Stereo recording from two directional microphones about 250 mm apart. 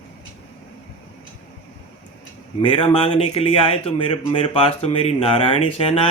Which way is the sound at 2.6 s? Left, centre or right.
Left.